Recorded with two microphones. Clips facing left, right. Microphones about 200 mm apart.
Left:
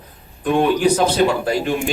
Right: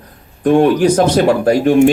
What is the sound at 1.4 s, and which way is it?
Speech, 50° right (ahead or behind).